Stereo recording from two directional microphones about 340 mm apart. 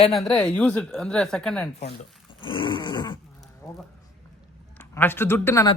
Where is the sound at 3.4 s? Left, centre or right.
Centre.